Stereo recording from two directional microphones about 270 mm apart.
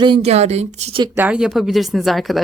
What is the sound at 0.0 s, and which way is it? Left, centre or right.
Speech, right.